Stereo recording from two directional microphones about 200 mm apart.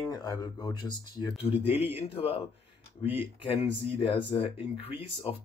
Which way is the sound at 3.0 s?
10° right (ahead or behind).